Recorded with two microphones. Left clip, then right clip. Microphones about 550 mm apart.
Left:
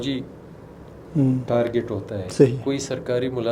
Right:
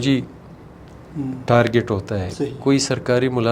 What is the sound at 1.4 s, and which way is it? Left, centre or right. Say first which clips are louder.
Speech: right 10 dB; right.